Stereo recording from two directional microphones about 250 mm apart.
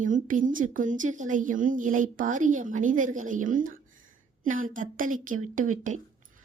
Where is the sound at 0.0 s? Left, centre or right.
Right.